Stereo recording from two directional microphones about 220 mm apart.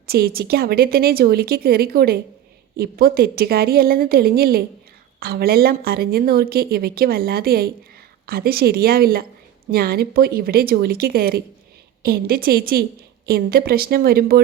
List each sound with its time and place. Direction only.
0.1 s speech: 45° right (ahead or behind)